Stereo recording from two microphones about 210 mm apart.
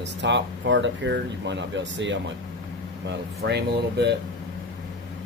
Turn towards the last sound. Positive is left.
turn(degrees=-55)  # may be behind; listen again after turning